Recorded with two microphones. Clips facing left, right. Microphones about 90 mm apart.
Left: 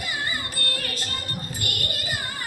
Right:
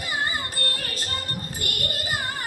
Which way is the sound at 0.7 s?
35° right (ahead or behind).